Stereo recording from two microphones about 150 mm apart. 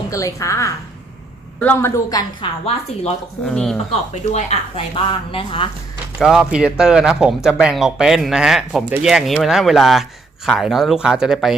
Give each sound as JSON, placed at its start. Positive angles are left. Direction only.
{"t": 0.1, "sound": "a woman's voice", "side_deg": 20}
{"t": 2.0, "sound": "a woman's voice", "side_deg": 25}
{"t": 3.5, "sound": "speech", "side_deg": 5}
{"t": 4.1, "sound": "speech", "side_deg": 50}
{"t": 4.9, "sound": "speech", "side_deg": 35}
{"t": 6.1, "sound": "speech", "side_deg": -5}